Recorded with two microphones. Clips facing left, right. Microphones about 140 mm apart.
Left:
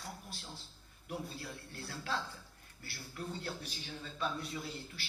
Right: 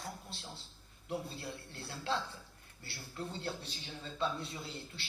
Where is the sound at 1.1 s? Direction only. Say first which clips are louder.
Right 2 dB; 25° right (ahead or behind).